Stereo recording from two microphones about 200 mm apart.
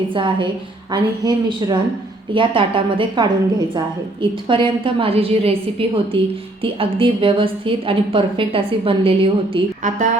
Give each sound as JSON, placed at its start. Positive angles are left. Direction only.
{"t": 0.1, "sound": "a woman's voice", "side_deg": -25}